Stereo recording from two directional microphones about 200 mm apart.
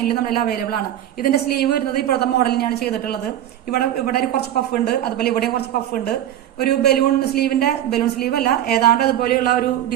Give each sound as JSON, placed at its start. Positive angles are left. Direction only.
{"t": 0.1, "sound": "speech", "side_deg": 50}